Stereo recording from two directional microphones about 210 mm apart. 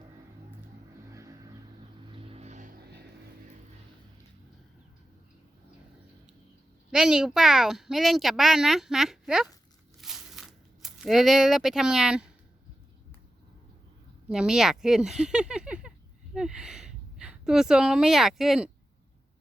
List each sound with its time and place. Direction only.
1.1 s vehicle: 15° right (ahead or behind)
2.1 s vehicle: 25° right (ahead or behind); by 3.1 s 50° right (ahead or behind)
6.9 s speech: 5° right (ahead or behind)
10.0 s a sound: centre (ahead or behind)
14.3 s a woman's voice: 5° right (ahead or behind)